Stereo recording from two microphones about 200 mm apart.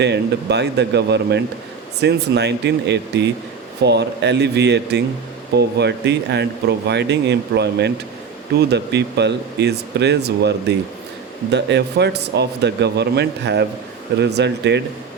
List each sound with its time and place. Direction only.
0.0 s speech: 60° right (ahead or behind)